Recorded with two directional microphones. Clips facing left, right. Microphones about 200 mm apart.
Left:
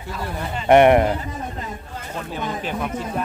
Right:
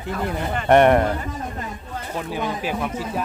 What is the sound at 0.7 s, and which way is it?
Speech, 10° left (ahead or behind).